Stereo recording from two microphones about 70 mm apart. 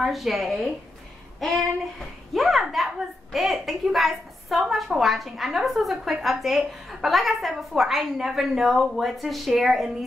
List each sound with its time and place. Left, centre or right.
0.0 s a woman's voice: centre
2.0 s a sound: centre
3.3 s a woman's voice: centre